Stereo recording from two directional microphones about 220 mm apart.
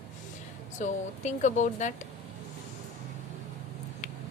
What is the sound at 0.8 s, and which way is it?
A woman's voice, 35° left (ahead or behind).